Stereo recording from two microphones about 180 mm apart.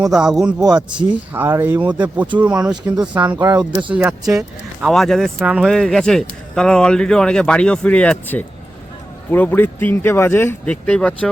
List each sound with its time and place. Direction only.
0.0 s speech: 5° right (ahead or behind)
0.6 s speech: 20° right (ahead or behind)
0.9 s speech: 10° right (ahead or behind)
3.8 s speech: 5° right (ahead or behind)